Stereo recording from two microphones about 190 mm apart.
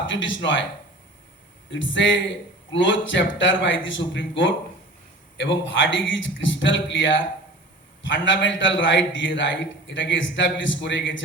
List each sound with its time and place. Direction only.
0.0 s speech: 80° left
1.7 s a man's voice: 75° left (ahead or behind)
8.0 s a man's voice: 75° left (ahead or behind)